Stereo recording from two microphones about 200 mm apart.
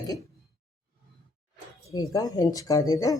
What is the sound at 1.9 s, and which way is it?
Speech, 20° left (ahead or behind).